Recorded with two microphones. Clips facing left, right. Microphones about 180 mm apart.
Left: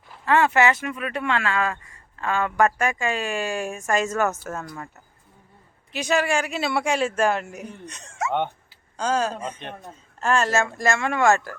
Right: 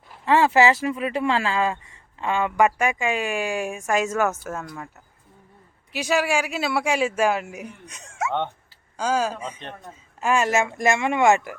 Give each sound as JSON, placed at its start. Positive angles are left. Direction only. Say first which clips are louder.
{"t": 0.3, "sound": "speech", "louder": "right 2 dB", "side_deg": -25}
{"t": 5.9, "sound": "speech", "louder": "even", "side_deg": -5}